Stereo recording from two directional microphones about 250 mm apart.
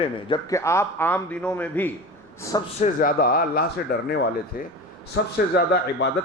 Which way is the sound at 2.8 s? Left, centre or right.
Left.